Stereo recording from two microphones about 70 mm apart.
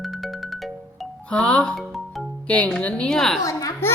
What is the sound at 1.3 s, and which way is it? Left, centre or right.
A woman's voice, centre.